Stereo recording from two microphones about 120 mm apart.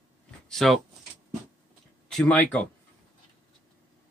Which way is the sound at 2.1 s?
5° left (ahead or behind).